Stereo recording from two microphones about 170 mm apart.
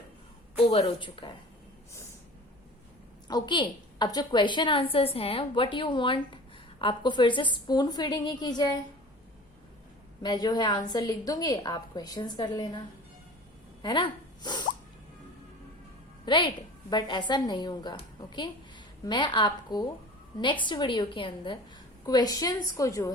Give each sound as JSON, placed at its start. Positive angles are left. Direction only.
{"t": 0.5, "sound": "speech", "side_deg": 35}
{"t": 3.2, "sound": "a woman's voice", "side_deg": 25}
{"t": 10.2, "sound": "a woman's voice", "side_deg": 25}
{"t": 13.8, "sound": "speech", "side_deg": 25}
{"t": 16.2, "sound": "a woman's voice", "side_deg": 30}